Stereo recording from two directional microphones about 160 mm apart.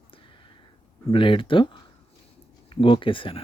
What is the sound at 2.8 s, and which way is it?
Speech, 30° left (ahead or behind).